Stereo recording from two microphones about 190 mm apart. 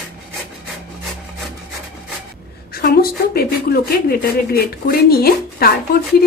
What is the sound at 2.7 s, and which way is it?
A woman's voice, 55° left (ahead or behind).